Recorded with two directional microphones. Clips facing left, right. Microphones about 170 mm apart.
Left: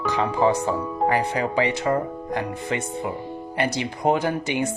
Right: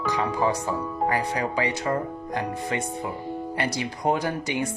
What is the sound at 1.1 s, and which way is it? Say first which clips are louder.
Speech: left 4 dB; 25° left (ahead or behind).